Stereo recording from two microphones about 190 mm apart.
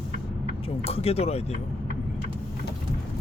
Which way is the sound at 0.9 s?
30° left (ahead or behind).